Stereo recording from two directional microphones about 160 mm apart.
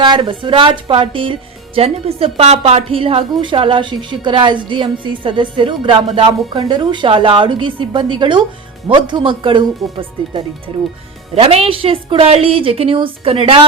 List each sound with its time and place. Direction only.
0.0 s speech: 30° right (ahead or behind)